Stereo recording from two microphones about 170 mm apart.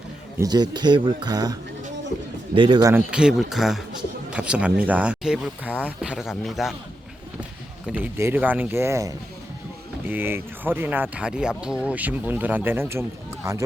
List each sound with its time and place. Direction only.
0.3 s speech: 25° right (ahead or behind)
2.6 s speech: 25° right (ahead or behind)
2.9 s speech: 5° right (ahead or behind)
7.9 s speech: 10° right (ahead or behind)